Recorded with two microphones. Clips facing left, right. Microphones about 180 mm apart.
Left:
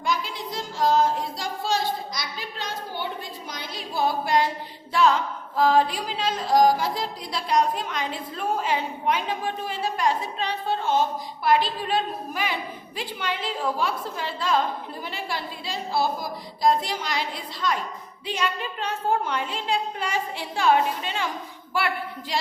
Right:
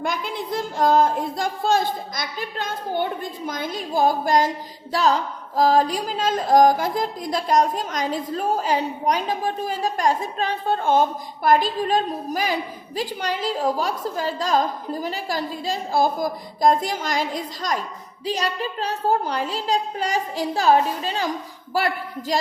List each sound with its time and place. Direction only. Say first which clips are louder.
0.0 s a woman's voice: right 2 dB; 55° right (ahead or behind); by 22.4 s 40° right (ahead or behind)